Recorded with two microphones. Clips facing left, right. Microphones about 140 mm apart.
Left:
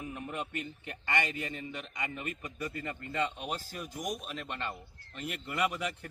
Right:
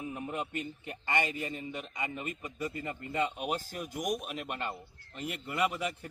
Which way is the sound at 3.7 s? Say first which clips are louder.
Right 2 dB; 50° right (ahead or behind).